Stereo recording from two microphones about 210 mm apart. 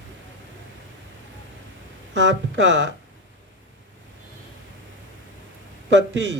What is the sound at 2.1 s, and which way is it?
Speech, 60° right (ahead or behind).